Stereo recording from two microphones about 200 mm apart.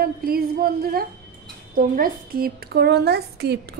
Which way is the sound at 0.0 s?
50° right (ahead or behind).